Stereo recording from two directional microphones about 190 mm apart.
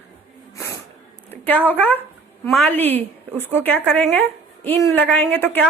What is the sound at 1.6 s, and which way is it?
A woman's voice, 10° left (ahead or behind).